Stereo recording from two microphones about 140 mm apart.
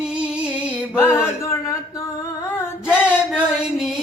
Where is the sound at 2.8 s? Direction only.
5° right (ahead or behind).